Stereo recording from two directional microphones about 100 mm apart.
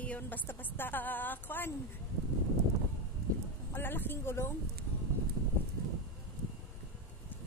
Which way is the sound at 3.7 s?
20° left (ahead or behind).